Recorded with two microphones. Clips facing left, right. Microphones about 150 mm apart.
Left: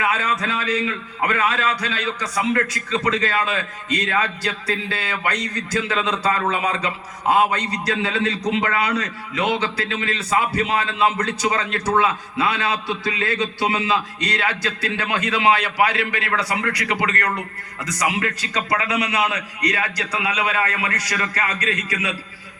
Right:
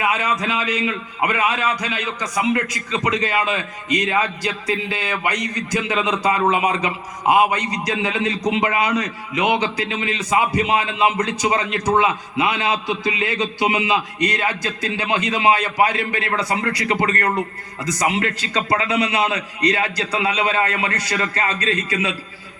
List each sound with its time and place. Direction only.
0.0 s a man's voice: 15° right (ahead or behind)
15.5 s a man's voice: 45° right (ahead or behind)
16.1 s a man's voice: 20° right (ahead or behind)
18.3 s a man's voice: 25° right (ahead or behind)